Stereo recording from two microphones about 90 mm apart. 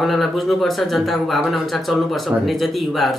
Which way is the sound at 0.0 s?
Centre (ahead or behind).